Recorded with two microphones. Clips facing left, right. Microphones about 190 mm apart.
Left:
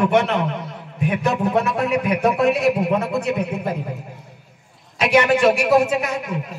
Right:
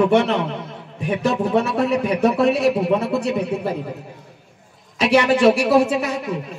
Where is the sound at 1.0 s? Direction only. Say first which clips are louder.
Even; 35° right (ahead or behind).